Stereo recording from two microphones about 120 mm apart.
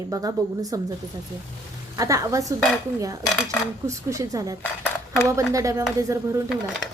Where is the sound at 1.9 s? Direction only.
30° right (ahead or behind).